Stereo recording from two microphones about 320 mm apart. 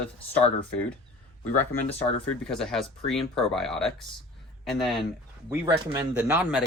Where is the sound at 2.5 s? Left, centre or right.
Centre.